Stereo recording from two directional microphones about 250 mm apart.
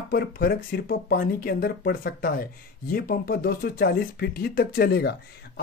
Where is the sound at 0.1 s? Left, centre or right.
Left.